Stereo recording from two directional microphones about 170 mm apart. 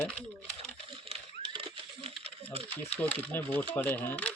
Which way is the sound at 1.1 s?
30° right (ahead or behind).